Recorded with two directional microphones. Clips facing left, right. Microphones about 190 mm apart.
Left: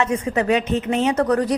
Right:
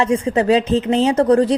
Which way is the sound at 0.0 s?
30° right (ahead or behind).